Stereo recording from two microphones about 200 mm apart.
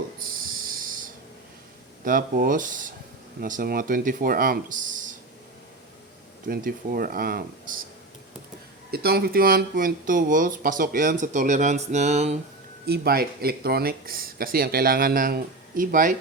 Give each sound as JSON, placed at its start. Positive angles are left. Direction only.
{"t": 0.3, "sound": "a sound", "side_deg": -45}
{"t": 2.0, "sound": "speech", "side_deg": -45}
{"t": 6.5, "sound": "speech", "side_deg": -45}
{"t": 8.9, "sound": "speech", "side_deg": -50}
{"t": 12.8, "sound": "speech", "side_deg": -50}